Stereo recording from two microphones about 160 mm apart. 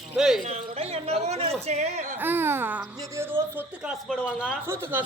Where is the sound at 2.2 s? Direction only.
15° right (ahead or behind).